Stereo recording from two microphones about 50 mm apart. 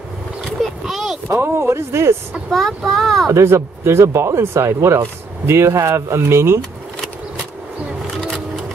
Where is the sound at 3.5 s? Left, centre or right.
Right.